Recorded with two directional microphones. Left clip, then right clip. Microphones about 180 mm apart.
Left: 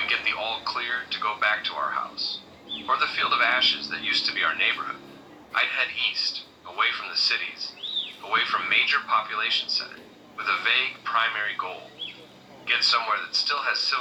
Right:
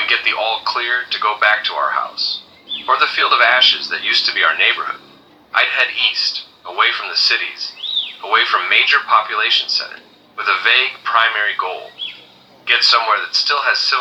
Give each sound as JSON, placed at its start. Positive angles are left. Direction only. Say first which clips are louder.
{"t": 0.0, "sound": "a man's voice", "louder": "right 10 dB", "side_deg": -60}